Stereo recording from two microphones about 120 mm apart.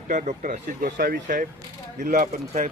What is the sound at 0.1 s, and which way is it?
Speech, 90° right.